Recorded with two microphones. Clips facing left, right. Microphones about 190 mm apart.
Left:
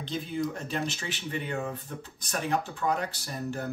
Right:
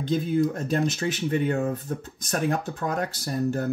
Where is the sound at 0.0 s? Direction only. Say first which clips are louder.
Right 8 dB; 45° right (ahead or behind).